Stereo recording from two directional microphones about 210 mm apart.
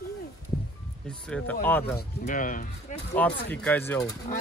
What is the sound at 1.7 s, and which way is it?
Speech, 10° left (ahead or behind).